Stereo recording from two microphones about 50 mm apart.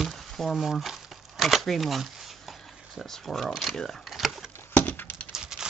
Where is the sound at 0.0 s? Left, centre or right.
Centre.